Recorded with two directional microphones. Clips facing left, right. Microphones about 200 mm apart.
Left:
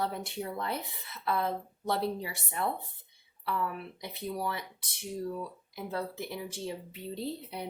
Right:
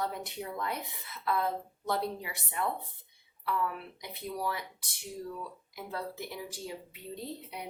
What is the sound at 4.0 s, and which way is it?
Speech, 25° left (ahead or behind).